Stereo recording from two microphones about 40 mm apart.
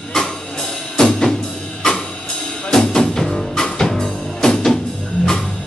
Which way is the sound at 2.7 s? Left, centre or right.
Centre.